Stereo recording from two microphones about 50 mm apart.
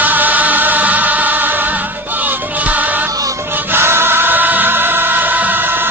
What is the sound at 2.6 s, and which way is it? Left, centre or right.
Music, right.